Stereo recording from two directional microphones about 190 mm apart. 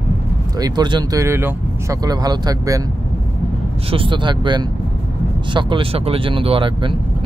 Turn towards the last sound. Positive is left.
turn(degrees=-25)  # may be behind; listen again after turning